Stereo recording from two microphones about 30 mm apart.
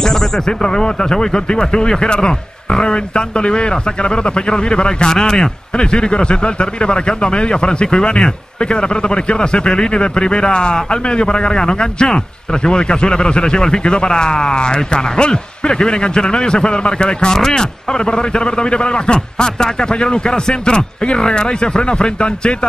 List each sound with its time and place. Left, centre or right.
0.0 s a sound: centre
0.5 s a man's voice: left
17.3 s a man's voice: left